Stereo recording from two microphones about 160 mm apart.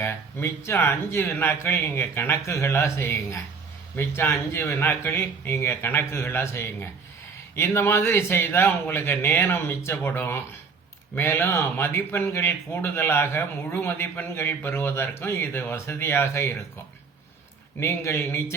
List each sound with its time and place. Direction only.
0.0 s speech: 15° left (ahead or behind)
17.7 s speech: 15° left (ahead or behind)